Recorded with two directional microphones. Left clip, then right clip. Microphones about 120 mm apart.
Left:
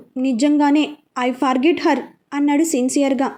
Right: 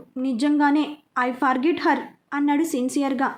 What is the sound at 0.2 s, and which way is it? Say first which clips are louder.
A woman's voice: left 4 dB; 30° left (ahead or behind).